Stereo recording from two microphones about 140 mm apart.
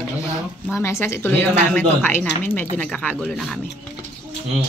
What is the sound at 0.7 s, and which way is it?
A woman's voice, 20° left (ahead or behind).